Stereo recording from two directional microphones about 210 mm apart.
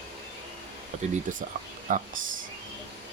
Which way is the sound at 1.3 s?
35° right (ahead or behind).